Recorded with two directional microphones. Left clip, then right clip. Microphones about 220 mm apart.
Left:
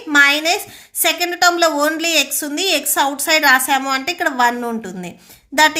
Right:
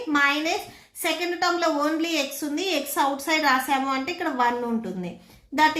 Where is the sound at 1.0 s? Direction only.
45° left (ahead or behind).